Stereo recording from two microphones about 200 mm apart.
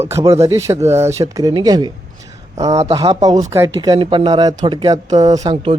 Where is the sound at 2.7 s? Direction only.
35° right (ahead or behind).